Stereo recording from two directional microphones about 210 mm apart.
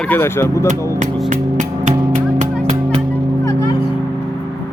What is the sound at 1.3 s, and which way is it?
Music, 35° right (ahead or behind).